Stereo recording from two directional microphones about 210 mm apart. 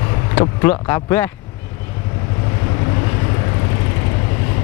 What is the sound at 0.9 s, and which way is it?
Speech, 10° left (ahead or behind).